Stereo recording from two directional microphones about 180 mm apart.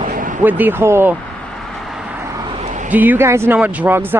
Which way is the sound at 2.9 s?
10° right (ahead or behind).